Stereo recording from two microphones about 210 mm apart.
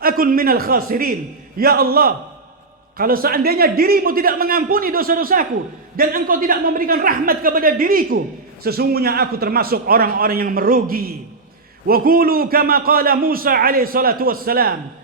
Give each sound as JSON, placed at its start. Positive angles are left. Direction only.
{"t": 0.0, "sound": "a man's voice", "side_deg": -40}